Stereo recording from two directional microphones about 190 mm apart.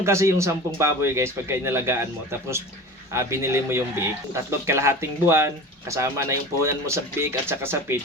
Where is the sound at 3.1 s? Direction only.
15° right (ahead or behind).